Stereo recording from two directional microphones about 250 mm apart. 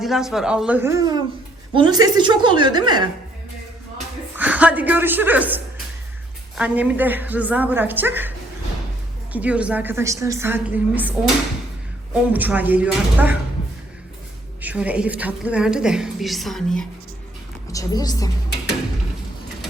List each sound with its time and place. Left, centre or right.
0.0 s a woman's voice: centre
4.4 s a woman's voice: centre
9.3 s a woman's voice: centre
12.1 s a woman's voice: centre
14.6 s a woman's voice: centre
17.7 s a woman's voice: centre